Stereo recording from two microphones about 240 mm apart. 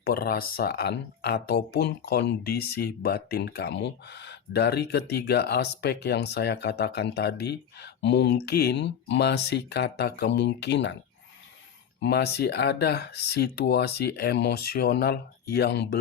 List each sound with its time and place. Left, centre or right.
0.0 s speech: left
12.0 s speech: left